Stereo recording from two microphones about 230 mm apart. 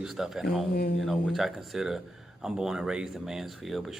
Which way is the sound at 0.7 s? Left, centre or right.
Left.